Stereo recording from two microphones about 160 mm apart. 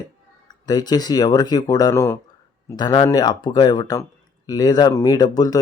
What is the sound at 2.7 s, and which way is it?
Speech, 25° left (ahead or behind).